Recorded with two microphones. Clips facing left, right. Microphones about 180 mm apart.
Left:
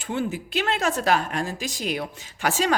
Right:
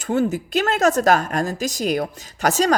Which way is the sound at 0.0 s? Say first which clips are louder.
Right 7 dB; 45° right (ahead or behind).